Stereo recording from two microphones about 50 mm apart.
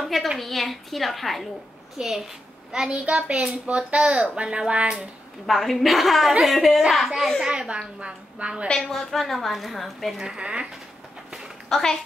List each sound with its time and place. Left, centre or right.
0.0 s a sound: centre
0.4 s a woman's voice: centre
2.7 s speech: centre
5.5 s a woman's voice: centre
7.4 s a woman's voice: centre
8.7 s a woman's voice: centre
10.2 s speech: centre
11.2 s a sound: centre
11.7 s speech: centre